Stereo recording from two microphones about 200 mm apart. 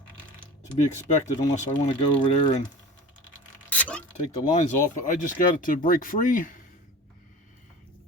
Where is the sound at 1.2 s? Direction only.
35° left (ahead or behind).